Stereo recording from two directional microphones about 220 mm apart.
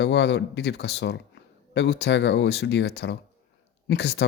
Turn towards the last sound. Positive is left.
turn(degrees=50)  # may be behind; listen again after turning